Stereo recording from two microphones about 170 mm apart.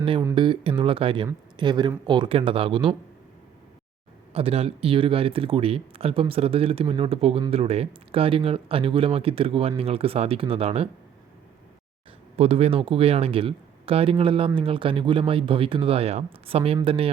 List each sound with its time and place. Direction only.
0.3 s speech: 30° right (ahead or behind)
4.3 s speech: 35° right (ahead or behind)
12.4 s speech: 40° right (ahead or behind)